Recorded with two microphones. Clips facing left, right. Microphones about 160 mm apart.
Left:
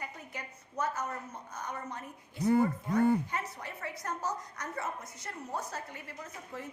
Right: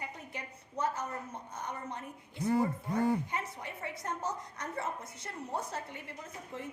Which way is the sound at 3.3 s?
20° right (ahead or behind).